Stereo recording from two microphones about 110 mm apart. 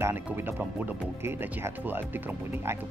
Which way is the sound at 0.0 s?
20° right (ahead or behind).